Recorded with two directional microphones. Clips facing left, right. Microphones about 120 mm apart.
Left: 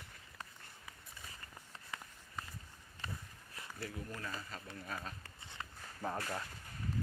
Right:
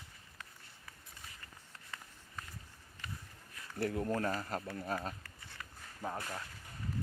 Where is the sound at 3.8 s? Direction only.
60° right (ahead or behind).